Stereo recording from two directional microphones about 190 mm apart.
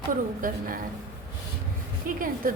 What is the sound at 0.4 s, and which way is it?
Speech, 45° right (ahead or behind).